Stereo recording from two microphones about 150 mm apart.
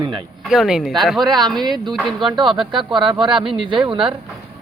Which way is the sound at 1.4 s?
30° right (ahead or behind).